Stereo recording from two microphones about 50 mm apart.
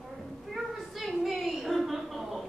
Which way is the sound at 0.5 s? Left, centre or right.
Centre.